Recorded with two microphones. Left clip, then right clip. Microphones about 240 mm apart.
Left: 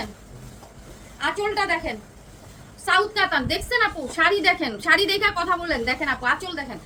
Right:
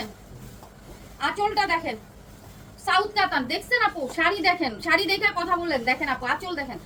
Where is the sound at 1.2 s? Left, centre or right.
Centre.